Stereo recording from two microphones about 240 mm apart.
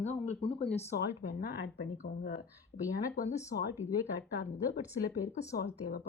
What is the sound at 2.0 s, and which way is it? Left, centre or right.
A woman's voice, left.